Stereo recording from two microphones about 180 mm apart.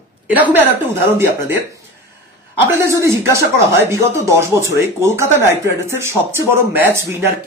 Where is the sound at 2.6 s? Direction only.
15° right (ahead or behind).